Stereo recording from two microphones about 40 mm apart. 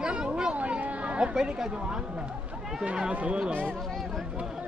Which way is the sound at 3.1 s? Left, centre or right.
Right.